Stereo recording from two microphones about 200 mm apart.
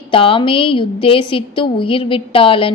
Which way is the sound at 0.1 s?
25° left (ahead or behind).